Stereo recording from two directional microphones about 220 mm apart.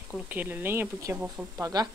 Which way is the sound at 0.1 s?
10° right (ahead or behind).